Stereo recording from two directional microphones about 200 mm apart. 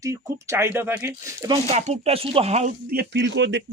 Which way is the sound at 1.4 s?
30° right (ahead or behind).